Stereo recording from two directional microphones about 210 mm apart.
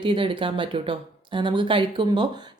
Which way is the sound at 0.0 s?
25° right (ahead or behind).